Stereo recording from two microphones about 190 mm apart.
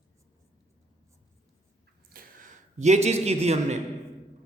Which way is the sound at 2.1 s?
45° right (ahead or behind).